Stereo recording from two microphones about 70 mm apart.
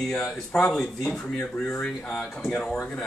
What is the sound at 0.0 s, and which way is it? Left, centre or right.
Speech, centre.